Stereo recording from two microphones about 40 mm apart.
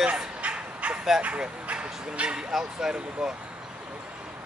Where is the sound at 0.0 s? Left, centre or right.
Right.